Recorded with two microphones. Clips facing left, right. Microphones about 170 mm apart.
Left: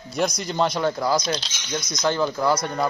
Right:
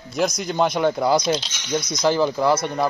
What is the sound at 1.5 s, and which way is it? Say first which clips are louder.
Speech: right 5 dB; 60° right (ahead or behind).